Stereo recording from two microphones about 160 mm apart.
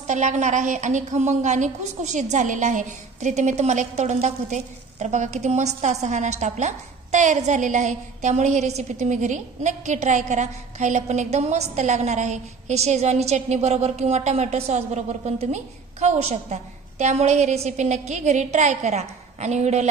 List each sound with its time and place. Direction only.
0.0 s a woman's voice: 50° right (ahead or behind)